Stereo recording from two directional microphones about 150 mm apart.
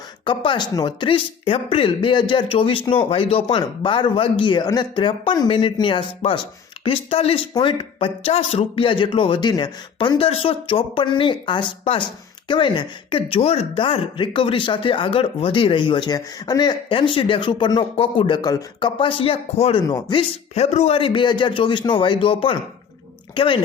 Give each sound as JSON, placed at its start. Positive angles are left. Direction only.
{"t": 0.3, "sound": "speech", "side_deg": 30}
{"t": 20.6, "sound": "speech", "side_deg": 45}